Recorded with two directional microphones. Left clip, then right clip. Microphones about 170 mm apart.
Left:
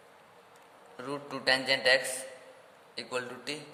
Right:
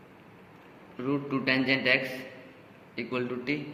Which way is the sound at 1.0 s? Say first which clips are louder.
Right 2 dB; 90° left.